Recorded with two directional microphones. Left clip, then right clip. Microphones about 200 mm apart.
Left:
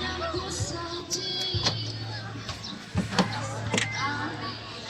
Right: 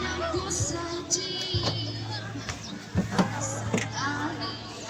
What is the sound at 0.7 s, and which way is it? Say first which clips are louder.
Music: right 2 dB; 35° right (ahead or behind).